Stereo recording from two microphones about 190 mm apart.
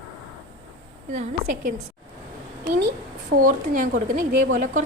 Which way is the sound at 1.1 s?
40° right (ahead or behind).